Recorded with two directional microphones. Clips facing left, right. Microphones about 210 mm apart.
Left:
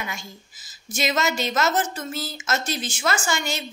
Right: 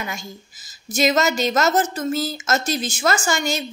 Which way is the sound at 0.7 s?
40° right (ahead or behind).